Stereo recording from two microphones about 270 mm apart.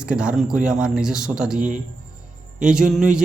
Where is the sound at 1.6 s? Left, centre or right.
Right.